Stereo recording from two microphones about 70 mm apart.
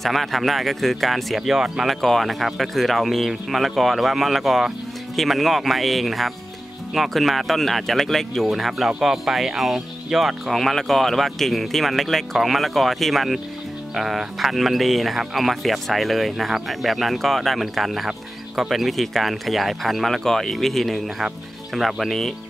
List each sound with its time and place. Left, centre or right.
0.0 s speech: centre